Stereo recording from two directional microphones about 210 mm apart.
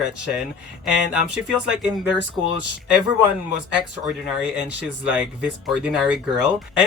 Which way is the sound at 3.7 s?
5° right (ahead or behind).